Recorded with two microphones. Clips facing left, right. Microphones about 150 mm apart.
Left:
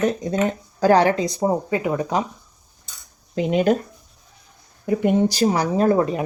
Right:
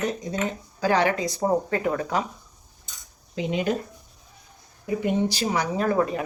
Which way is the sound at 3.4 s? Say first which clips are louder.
Left 7 dB; 60° left (ahead or behind).